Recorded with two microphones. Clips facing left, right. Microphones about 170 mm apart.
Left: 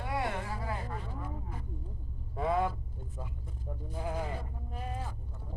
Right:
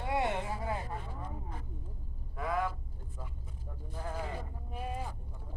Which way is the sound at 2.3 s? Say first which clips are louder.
Left 4 dB; 25° left (ahead or behind).